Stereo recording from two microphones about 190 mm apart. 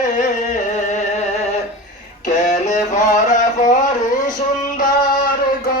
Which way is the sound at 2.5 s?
40° left (ahead or behind).